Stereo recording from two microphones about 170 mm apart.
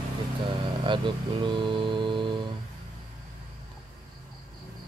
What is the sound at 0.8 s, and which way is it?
Speech, 30° right (ahead or behind).